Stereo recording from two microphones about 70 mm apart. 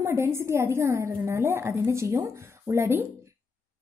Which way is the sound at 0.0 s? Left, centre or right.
Right.